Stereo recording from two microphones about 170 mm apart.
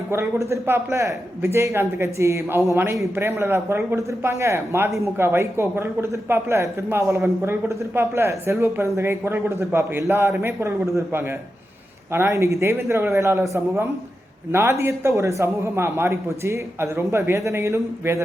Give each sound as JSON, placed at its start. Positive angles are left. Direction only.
{"t": 0.1, "sound": "speech", "side_deg": -15}